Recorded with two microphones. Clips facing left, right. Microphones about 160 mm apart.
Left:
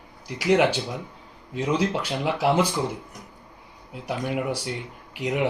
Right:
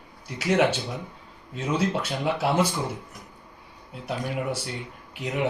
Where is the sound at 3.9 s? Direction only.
10° left (ahead or behind).